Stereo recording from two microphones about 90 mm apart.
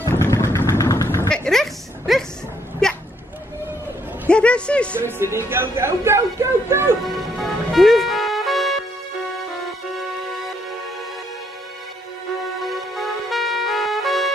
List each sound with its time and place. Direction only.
0.1 s vehicle: 30° left (ahead or behind)
1.0 s a sound: 30° left (ahead or behind)
1.3 s a sound: 5° left (ahead or behind)
4.3 s a woman's voice: 10° left (ahead or behind)
4.9 s speech: 25° right (ahead or behind)
7.1 s music: centre (ahead or behind)
12.6 s music: centre (ahead or behind)